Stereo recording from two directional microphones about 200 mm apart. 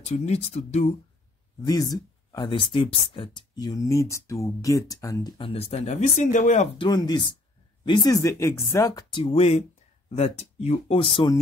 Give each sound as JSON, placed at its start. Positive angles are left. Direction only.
{"t": 0.0, "sound": "speech", "side_deg": 35}
{"t": 1.6, "sound": "speech", "side_deg": 20}
{"t": 6.9, "sound": "speech", "side_deg": 20}